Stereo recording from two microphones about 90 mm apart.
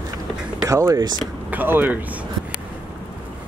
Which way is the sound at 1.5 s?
20° right (ahead or behind).